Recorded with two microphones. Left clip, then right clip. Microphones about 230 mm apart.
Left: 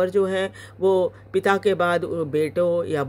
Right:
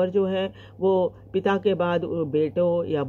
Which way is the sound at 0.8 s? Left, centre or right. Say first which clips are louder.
Left 2 dB; left.